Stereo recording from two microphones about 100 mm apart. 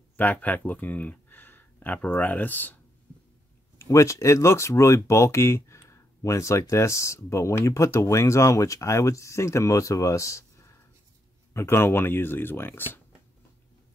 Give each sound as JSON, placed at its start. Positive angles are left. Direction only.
{"t": 0.2, "sound": "speech", "side_deg": 15}
{"t": 3.7, "sound": "speech", "side_deg": 30}